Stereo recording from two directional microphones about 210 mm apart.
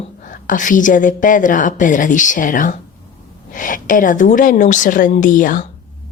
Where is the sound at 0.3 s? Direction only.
40° left (ahead or behind).